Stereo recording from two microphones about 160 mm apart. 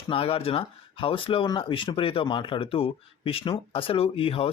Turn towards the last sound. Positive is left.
turn(degrees=35)  # may be behind; listen again after turning